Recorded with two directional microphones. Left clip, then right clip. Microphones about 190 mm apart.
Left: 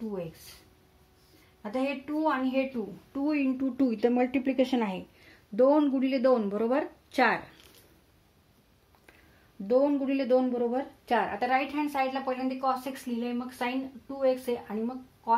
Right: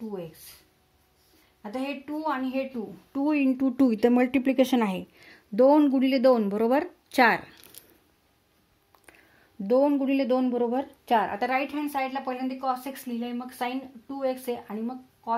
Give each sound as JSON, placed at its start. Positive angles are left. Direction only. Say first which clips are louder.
{"t": 1.8, "sound": "speech", "louder": "left 2 dB", "side_deg": -40}
{"t": 9.7, "sound": "speech", "louder": "right 3 dB", "side_deg": -55}